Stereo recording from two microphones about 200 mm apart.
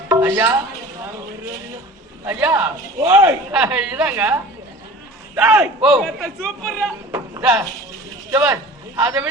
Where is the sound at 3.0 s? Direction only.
10° right (ahead or behind).